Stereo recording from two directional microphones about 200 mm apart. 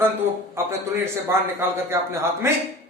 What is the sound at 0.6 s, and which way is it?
A man's voice, 15° right (ahead or behind).